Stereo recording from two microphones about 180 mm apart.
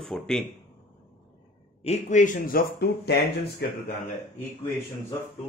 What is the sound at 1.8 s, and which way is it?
Speech, 40° left (ahead or behind).